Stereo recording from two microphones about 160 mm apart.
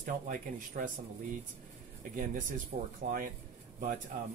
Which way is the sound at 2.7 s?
55° right (ahead or behind).